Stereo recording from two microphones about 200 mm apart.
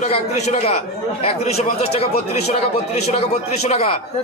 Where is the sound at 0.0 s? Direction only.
35° left (ahead or behind).